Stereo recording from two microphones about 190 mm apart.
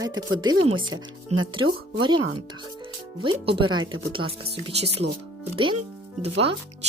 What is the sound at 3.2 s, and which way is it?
Speech, 25° right (ahead or behind).